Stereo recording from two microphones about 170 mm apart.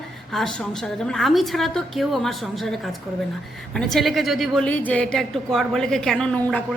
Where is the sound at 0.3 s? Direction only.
5° left (ahead or behind).